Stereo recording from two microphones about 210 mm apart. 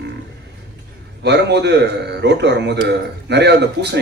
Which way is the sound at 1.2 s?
55° right (ahead or behind).